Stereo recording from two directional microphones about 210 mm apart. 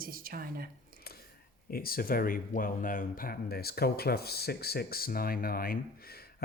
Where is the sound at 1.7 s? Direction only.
45° left (ahead or behind).